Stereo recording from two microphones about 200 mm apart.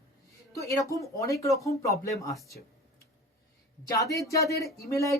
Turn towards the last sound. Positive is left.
turn(degrees=15)  # may be behind; listen again after turning